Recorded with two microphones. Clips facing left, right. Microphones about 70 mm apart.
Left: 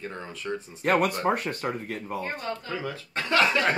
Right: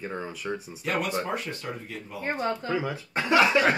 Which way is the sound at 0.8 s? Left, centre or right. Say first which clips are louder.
Left 6 dB; left.